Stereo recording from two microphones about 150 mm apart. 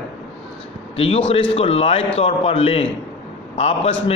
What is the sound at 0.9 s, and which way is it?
A man's voice, 40° left (ahead or behind).